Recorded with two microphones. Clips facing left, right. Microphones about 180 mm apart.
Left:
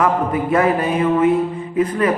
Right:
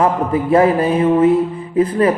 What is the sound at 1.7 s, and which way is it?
Speech, 30° right (ahead or behind).